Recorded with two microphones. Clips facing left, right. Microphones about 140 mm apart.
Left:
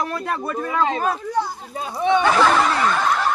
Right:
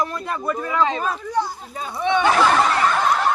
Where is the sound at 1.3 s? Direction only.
5° left (ahead or behind).